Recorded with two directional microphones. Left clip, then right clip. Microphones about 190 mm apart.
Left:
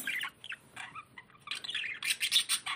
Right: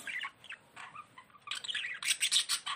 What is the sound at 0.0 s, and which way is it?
Bird, 55° left (ahead or behind).